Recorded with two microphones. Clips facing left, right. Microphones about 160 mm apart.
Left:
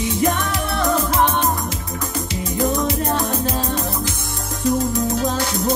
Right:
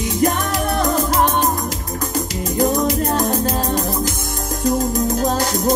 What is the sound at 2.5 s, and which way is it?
Music, 40° right (ahead or behind).